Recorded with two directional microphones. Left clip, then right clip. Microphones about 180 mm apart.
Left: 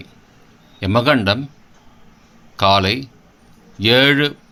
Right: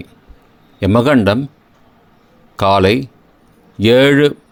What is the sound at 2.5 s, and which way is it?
Speech, 40° right (ahead or behind).